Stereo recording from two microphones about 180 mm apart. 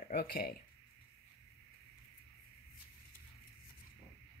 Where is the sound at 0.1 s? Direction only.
55° left (ahead or behind).